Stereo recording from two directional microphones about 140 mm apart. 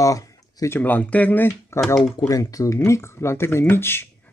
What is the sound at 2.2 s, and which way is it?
Speech, 25° left (ahead or behind).